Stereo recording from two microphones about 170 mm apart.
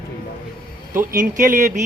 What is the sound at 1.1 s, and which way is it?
Speech, 50° right (ahead or behind).